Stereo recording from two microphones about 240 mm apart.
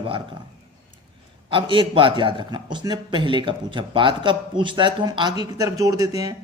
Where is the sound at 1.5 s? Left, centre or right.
Right.